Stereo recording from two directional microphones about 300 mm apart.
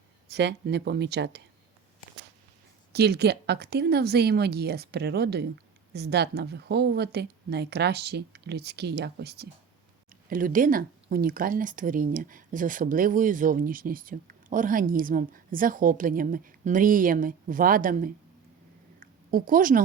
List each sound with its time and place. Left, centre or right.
0.3 s speech: right
2.9 s speech: right
18.9 s a sound: right